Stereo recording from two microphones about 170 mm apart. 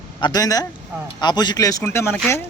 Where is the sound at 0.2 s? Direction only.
25° left (ahead or behind).